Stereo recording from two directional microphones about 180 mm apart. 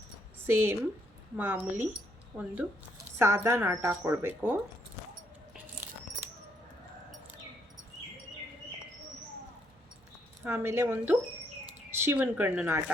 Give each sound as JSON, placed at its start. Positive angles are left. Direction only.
{"t": 0.4, "sound": "a woman's voice", "side_deg": -10}
{"t": 10.4, "sound": "a woman's voice", "side_deg": -15}